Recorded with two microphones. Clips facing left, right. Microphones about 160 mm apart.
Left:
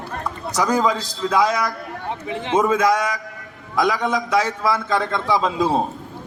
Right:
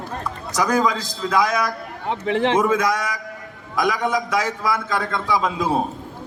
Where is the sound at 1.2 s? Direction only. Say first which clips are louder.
Left 1 dB; 20° left (ahead or behind).